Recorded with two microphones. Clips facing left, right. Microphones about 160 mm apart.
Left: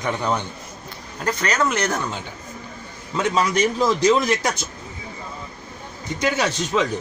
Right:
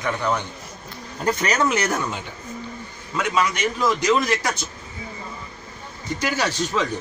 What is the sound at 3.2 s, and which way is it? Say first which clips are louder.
A man's voice: left 3 dB; 30° left (ahead or behind).